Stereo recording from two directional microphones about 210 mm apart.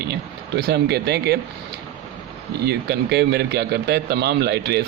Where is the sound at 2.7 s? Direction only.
50° right (ahead or behind).